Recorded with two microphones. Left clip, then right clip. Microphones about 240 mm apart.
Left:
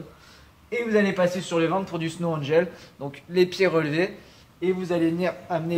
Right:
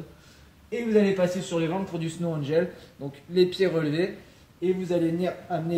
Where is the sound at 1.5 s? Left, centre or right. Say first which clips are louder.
Left 4 dB; centre.